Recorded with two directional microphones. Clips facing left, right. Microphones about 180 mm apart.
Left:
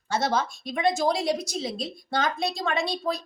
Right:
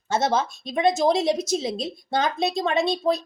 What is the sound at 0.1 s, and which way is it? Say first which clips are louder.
A woman's voice: right 3 dB; 25° right (ahead or behind).